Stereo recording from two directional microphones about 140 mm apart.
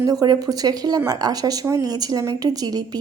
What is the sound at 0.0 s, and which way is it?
Speech, 25° right (ahead or behind).